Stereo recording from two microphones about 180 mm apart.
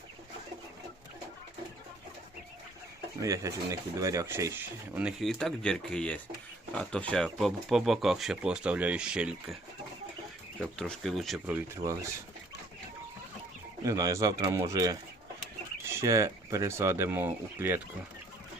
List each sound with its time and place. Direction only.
3.2 s speech: 20° right (ahead or behind)
10.6 s speech: 5° left (ahead or behind)
11.5 s speech: 15° right (ahead or behind)
13.8 s speech: 20° right (ahead or behind)
16.0 s speech: 15° right (ahead or behind)